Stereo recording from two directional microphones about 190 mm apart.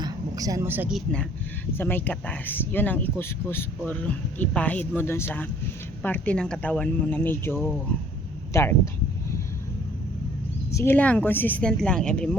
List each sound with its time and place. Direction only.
0.0 s speech: 20° right (ahead or behind); by 8.7 s 15° left (ahead or behind)
10.7 s speech: 15° left (ahead or behind)